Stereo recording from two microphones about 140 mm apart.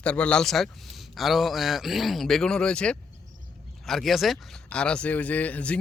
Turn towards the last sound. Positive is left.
turn(degrees=10)  # may be behind; listen again after turning